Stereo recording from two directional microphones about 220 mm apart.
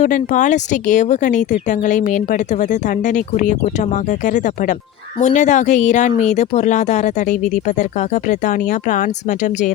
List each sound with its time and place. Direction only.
0.0 s speech: 35° left (ahead or behind)